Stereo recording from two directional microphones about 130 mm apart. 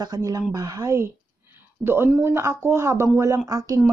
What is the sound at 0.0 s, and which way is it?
A woman's voice, 30° right (ahead or behind).